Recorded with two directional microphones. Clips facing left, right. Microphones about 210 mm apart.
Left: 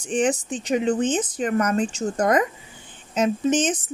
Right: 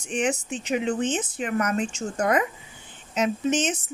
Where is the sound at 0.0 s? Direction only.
30° left (ahead or behind).